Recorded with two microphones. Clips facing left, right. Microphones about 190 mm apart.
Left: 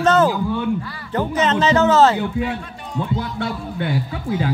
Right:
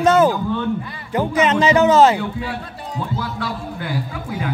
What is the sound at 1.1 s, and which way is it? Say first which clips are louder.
Speech: right 2 dB; 10° right (ahead or behind).